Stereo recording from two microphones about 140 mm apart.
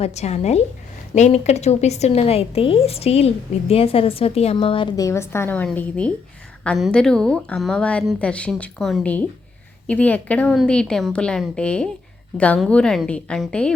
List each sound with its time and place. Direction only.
0.0 s a woman's voice: 50° left (ahead or behind)
4.9 s a woman's voice: 20° left (ahead or behind)